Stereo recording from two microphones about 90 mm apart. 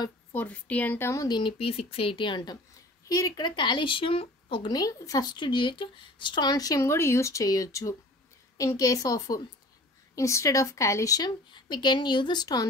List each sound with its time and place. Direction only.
0.3 s a woman's voice: 15° left (ahead or behind)
1.2 s speech: 55° left (ahead or behind)
1.6 s speech: 90° left; by 2.6 s 55° left (ahead or behind)
3.1 s speech: 40° left (ahead or behind)
3.4 s a woman's voice: 60° left (ahead or behind); by 4.6 s 85° left
4.6 s a woman's voice: 45° left (ahead or behind); by 6.5 s 60° left (ahead or behind)
6.5 s speech: 40° left (ahead or behind)
11.5 s a woman's voice: 55° left (ahead or behind)